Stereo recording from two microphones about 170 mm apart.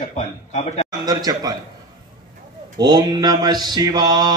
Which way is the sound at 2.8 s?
25° right (ahead or behind).